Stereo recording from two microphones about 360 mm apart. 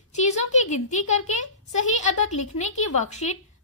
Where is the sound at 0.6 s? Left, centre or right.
Centre.